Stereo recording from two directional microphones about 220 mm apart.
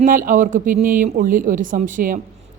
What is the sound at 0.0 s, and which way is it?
Speech, 40° right (ahead or behind).